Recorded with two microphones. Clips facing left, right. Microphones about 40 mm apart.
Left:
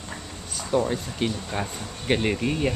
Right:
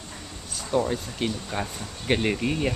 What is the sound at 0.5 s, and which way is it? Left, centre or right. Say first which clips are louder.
Speech: left 1 dB; centre.